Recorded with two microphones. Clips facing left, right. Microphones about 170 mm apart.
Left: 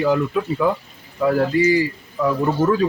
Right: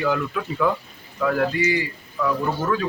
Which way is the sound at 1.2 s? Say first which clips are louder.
Left 4 dB; 30° left (ahead or behind).